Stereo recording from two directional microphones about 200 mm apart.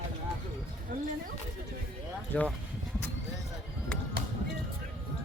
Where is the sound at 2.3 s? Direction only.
5° left (ahead or behind).